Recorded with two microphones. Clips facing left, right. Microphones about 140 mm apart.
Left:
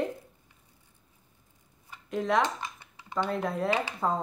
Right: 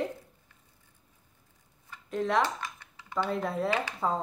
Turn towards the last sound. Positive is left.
turn(degrees=0)  # may be behind; listen again after turning